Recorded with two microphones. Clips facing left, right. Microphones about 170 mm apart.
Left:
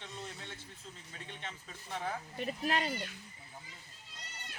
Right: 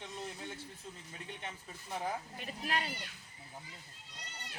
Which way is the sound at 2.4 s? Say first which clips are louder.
Left 6 dB; 35° left (ahead or behind).